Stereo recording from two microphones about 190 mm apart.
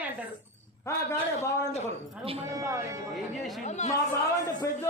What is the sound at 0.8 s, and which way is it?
Speech, 15° left (ahead or behind).